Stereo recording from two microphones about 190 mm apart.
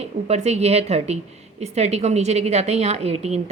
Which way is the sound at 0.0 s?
35° right (ahead or behind).